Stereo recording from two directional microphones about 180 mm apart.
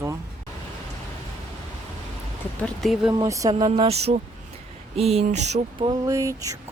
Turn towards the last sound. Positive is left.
turn(degrees=-20)  # may be behind; listen again after turning